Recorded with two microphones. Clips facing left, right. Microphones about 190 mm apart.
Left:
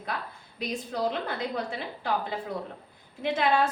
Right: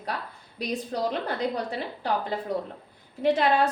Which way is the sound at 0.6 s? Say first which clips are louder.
Right 2 dB; 40° right (ahead or behind).